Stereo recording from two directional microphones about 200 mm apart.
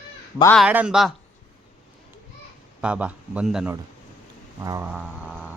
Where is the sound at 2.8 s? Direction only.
5° right (ahead or behind).